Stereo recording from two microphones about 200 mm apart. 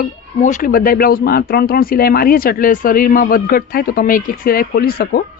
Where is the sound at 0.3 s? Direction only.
40° left (ahead or behind).